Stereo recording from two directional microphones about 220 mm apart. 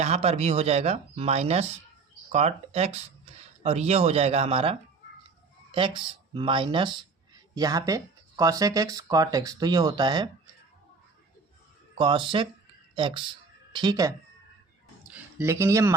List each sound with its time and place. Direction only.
0.0 s speech: 30° right (ahead or behind)
11.9 s speech: 20° right (ahead or behind)